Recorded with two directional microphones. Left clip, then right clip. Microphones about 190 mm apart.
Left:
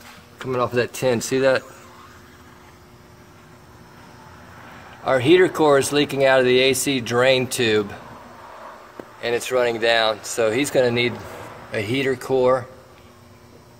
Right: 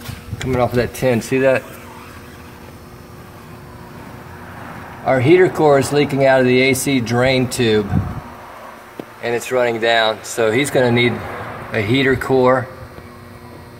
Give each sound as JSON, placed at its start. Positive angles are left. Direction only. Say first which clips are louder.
{"t": 0.5, "sound": "speech", "louder": "right 4 dB", "side_deg": 60}
{"t": 5.0, "sound": "speech", "louder": "right 3 dB", "side_deg": 35}
{"t": 9.5, "sound": "speech", "louder": "right 3 dB", "side_deg": 40}